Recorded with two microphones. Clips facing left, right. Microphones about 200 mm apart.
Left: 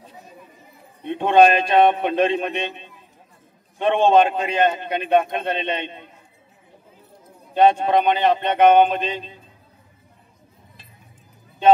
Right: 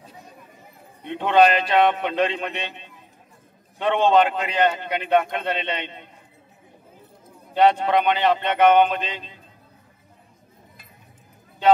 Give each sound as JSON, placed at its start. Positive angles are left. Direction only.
{"t": 1.0, "sound": "a man's voice", "side_deg": 20}
{"t": 3.8, "sound": "a man's voice", "side_deg": 20}
{"t": 7.5, "sound": "a man's voice", "side_deg": 20}